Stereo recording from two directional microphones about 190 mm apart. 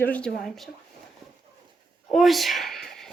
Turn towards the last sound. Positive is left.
turn(degrees=0)  # may be behind; listen again after turning